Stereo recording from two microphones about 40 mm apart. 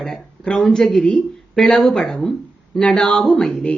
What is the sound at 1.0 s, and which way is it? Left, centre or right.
Speech, centre.